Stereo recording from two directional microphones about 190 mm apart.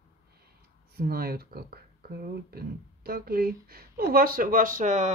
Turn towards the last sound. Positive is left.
turn(degrees=-40)  # may be behind; listen again after turning